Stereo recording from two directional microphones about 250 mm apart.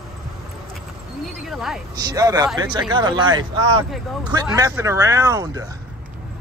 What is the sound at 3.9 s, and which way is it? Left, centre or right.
Speech, centre.